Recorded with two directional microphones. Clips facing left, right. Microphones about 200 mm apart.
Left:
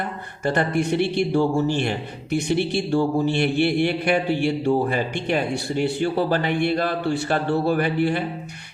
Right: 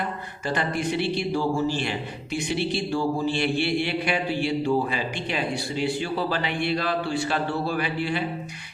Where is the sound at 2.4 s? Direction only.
55° left (ahead or behind).